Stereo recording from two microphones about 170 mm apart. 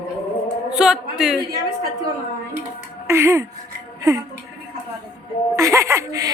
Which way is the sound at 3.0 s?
15° right (ahead or behind).